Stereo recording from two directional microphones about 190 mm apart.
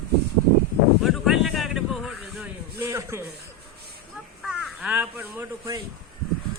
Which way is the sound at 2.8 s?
15° right (ahead or behind).